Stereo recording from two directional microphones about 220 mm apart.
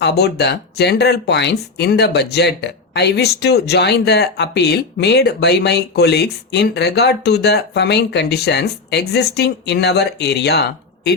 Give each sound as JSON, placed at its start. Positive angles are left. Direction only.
{"t": 0.0, "sound": "speech", "side_deg": 50}